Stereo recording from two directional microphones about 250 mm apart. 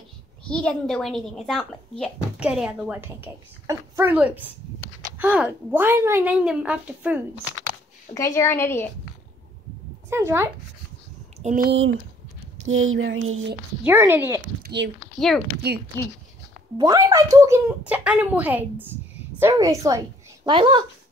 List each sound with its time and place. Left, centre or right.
0.5 s speech: centre
8.1 s a woman's voice: centre
10.0 s speech: centre
11.3 s a sound: right
12.6 s a sound: right
13.8 s a woman's voice: centre
14.6 s a sound: right
15.1 s speech: centre
16.7 s a woman's voice: centre